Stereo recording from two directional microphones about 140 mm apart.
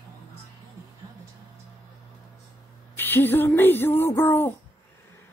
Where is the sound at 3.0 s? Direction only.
15° left (ahead or behind).